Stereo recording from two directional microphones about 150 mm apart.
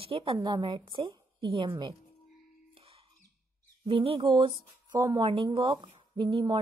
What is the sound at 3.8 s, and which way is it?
Speech, 40° right (ahead or behind).